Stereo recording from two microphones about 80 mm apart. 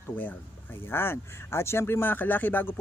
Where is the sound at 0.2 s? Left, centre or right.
Left.